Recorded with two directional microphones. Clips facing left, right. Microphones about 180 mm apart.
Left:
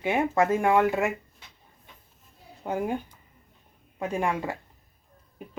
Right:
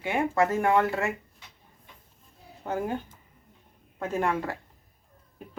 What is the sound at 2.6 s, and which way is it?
A woman's voice, 15° left (ahead or behind).